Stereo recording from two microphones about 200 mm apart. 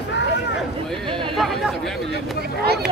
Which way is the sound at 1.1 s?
25° right (ahead or behind).